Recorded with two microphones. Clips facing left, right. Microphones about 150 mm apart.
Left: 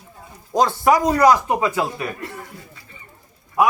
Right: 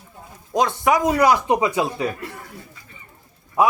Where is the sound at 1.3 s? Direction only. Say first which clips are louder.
Even; 15° right (ahead or behind).